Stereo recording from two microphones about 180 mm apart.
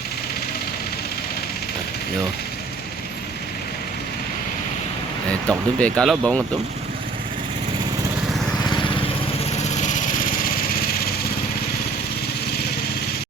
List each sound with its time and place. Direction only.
5.5 s speech: 5° left (ahead or behind)
8.7 s lawn mower: 25° left (ahead or behind)
9.7 s vehicle: 45° left (ahead or behind)